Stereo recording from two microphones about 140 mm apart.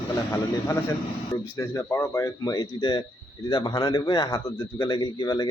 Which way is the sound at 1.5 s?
20° left (ahead or behind).